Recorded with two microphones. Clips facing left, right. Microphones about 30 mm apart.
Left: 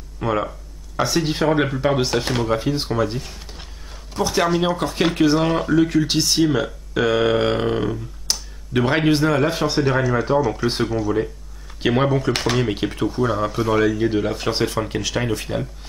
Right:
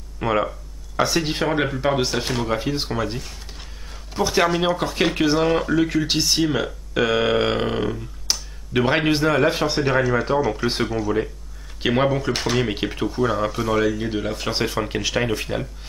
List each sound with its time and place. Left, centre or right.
0.2 s speech: centre
3.2 s a sound: centre
4.1 s speech: centre